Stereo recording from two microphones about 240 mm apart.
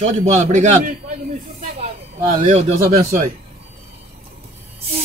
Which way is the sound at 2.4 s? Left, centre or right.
Right.